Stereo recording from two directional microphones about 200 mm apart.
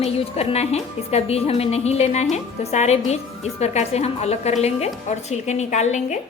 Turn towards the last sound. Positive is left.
turn(degrees=35)  # may be behind; listen again after turning